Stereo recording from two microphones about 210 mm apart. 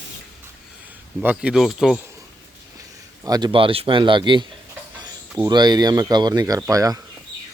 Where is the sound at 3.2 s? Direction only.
20° right (ahead or behind).